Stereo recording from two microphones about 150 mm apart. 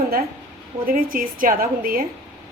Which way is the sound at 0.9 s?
65° right (ahead or behind).